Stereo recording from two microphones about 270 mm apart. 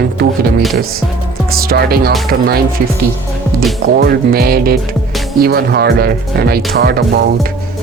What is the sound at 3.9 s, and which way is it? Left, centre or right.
Speech, right.